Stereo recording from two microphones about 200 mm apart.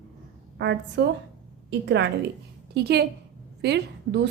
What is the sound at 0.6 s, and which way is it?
Speech, 60° right (ahead or behind).